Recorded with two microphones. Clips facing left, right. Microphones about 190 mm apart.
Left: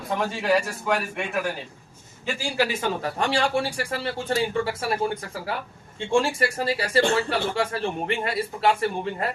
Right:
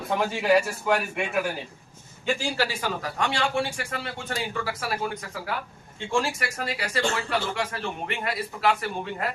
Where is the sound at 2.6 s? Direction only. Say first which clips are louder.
Left 3 dB; 20° left (ahead or behind).